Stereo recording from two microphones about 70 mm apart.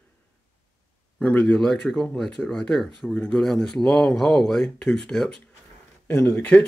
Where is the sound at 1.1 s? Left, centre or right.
Centre.